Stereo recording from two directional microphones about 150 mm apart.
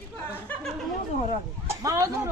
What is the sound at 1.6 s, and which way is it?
Speech, 20° right (ahead or behind).